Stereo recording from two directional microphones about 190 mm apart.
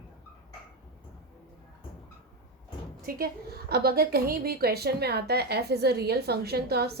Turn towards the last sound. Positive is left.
turn(degrees=-55)  # may be behind; listen again after turning